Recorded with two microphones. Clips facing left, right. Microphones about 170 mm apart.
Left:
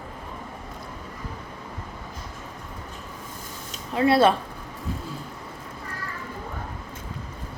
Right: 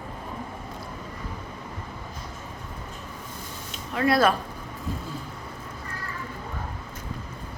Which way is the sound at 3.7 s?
30° left (ahead or behind).